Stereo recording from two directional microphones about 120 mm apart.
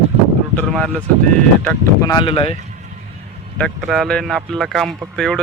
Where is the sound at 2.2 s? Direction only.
50° left (ahead or behind).